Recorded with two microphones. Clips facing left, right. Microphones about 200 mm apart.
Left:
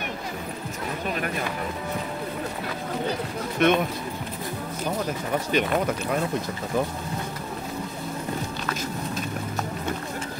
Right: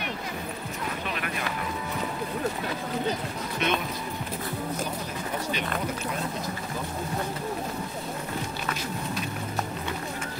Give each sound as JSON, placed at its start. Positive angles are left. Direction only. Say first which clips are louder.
{"t": 3.6, "sound": "speech", "louder": "left 8 dB", "side_deg": 50}